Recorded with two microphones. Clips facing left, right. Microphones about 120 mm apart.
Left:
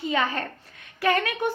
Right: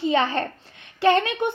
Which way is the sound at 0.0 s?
30° right (ahead or behind).